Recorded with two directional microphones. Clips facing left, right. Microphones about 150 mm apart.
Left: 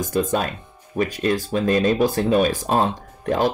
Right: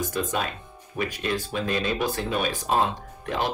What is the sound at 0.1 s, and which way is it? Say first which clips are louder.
Speech: left 6 dB; 40° left (ahead or behind).